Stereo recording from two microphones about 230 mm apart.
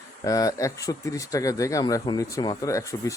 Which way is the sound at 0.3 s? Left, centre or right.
Centre.